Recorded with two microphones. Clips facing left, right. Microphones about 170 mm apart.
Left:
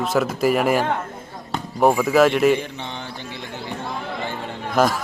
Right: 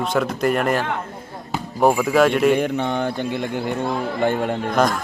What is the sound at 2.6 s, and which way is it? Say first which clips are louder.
Mantra: right 10 dB; 50° right (ahead or behind).